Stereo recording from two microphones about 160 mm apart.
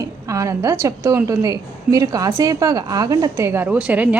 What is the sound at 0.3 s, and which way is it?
A woman's voice, 20° right (ahead or behind).